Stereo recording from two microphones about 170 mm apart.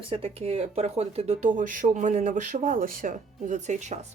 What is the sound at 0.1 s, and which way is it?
Speech, 35° right (ahead or behind).